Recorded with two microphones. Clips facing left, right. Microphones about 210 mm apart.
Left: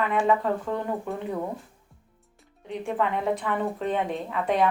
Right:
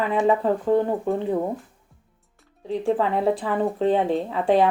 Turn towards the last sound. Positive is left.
turn(degrees=-30)  # may be behind; listen again after turning